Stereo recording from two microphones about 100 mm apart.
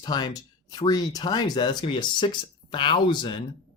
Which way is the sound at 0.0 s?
40° left (ahead or behind).